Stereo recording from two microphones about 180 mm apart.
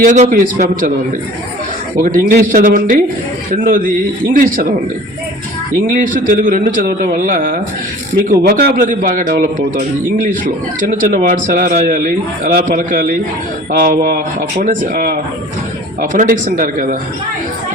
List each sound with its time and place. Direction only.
0.0 s a man's voice: 45° right (ahead or behind)
2.0 s a man's voice: 50° right (ahead or behind)
5.9 s a man's voice: 50° right (ahead or behind)